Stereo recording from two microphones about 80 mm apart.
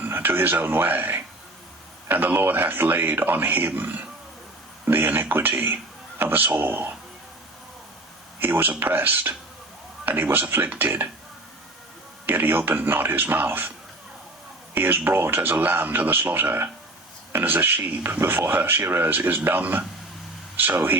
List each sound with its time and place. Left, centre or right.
0.0 s speech: right
8.4 s speech: right
12.2 s speech: right